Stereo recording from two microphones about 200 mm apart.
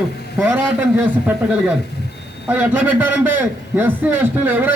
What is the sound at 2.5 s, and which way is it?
A man's voice, 10° right (ahead or behind).